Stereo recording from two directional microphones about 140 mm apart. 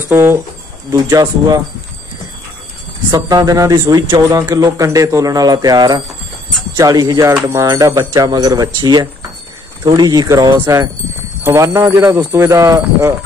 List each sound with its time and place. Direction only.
0.1 s a man's voice: 15° right (ahead or behind)
3.1 s a man's voice: 25° right (ahead or behind)